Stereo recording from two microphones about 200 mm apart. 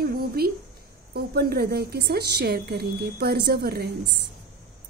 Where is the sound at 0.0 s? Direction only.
50° right (ahead or behind).